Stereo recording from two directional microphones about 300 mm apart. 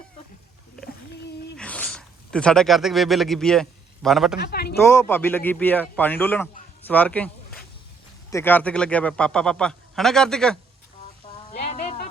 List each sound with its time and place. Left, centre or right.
1.5 s speech: centre
4.4 s speech: left
4.9 s a man's voice: centre
8.3 s a man's voice: centre
11.5 s a sound: left